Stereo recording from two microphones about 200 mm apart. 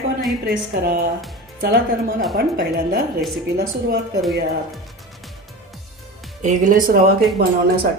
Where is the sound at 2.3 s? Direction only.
55° right (ahead or behind).